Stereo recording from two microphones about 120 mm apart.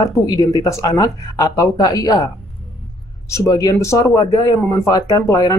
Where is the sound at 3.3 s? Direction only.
30° left (ahead or behind).